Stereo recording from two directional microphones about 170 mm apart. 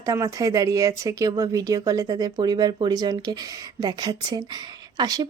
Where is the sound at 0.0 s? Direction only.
20° right (ahead or behind).